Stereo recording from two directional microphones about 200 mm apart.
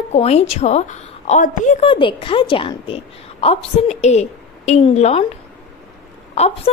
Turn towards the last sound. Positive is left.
turn(degrees=30)  # may be behind; listen again after turning